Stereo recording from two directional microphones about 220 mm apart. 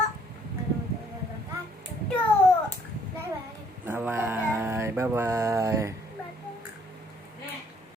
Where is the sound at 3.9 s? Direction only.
10° right (ahead or behind).